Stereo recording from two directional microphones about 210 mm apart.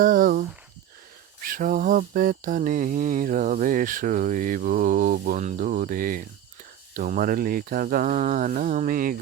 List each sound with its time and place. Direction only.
0.0 s speech: 40° right (ahead or behind)
1.4 s mantra: 40° right (ahead or behind)